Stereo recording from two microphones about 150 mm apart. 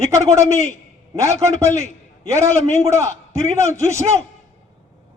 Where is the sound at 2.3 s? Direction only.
20° right (ahead or behind).